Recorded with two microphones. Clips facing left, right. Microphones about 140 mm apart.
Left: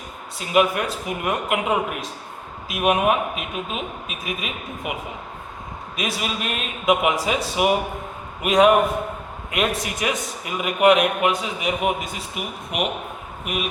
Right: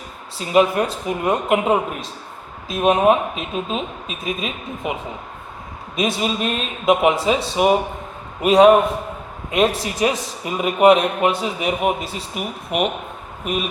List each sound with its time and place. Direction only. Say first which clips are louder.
0.3 s speech: right 3 dB; 30° right (ahead or behind)
6.0 s a man's voice: right 6 dB; 30° right (ahead or behind)